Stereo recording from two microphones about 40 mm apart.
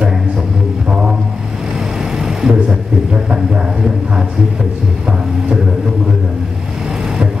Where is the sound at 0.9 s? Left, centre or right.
Right.